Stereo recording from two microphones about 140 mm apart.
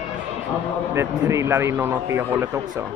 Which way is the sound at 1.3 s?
20° right (ahead or behind).